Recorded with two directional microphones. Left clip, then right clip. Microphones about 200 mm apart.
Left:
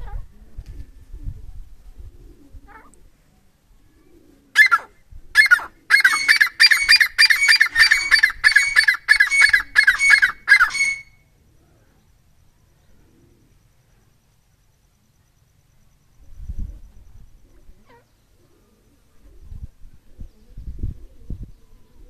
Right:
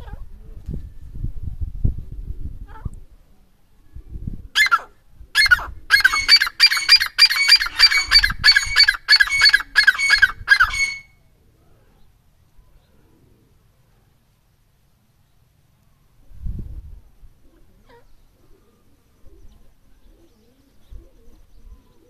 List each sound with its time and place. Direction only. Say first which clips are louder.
4.5 s fowl: left 3 dB; centre (ahead or behind)